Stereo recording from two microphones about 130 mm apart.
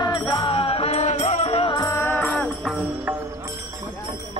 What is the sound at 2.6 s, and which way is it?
Music, 5° right (ahead or behind).